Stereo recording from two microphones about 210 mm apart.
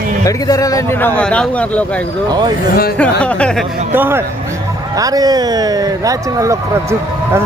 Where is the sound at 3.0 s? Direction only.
5° left (ahead or behind).